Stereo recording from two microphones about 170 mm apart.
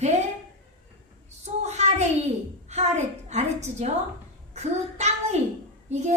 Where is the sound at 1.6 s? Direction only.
40° right (ahead or behind).